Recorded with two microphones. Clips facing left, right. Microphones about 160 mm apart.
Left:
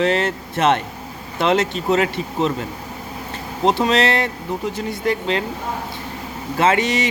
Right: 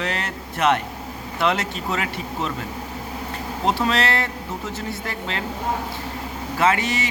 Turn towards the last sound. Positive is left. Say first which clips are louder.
# left 3 dB
turn(degrees=20)  # may be behind; listen again after turning